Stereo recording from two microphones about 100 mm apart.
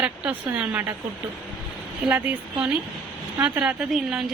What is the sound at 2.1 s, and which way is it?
A woman's voice, 15° right (ahead or behind).